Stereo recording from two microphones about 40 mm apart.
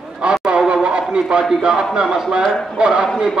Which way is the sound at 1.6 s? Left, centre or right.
Right.